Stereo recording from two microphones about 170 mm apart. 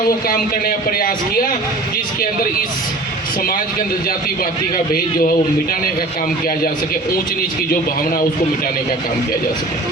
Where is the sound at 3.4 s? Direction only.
55° left (ahead or behind).